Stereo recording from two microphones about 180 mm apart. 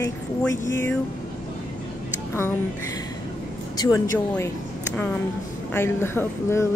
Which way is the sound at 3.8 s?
15° left (ahead or behind).